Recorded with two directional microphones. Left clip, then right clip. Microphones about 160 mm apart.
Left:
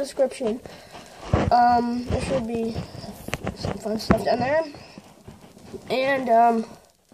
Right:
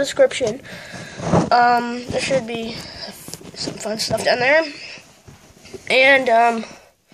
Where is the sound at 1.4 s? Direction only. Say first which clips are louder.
Right 2 dB; 25° right (ahead or behind).